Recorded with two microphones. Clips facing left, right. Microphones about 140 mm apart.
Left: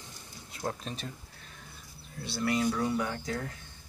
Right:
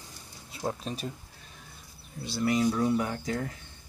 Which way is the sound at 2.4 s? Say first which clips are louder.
Right 3 dB; 10° right (ahead or behind).